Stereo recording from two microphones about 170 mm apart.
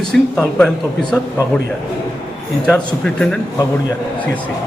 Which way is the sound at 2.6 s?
5° left (ahead or behind).